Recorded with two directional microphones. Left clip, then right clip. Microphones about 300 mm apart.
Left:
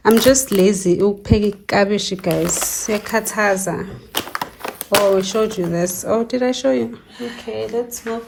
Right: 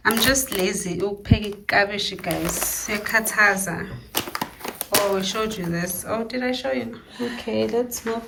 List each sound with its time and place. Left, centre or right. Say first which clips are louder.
0.0 s speech: left 7 dB; centre
7.4 s speech: even; centre